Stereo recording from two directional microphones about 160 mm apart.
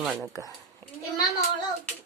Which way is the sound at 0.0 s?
Centre (ahead or behind).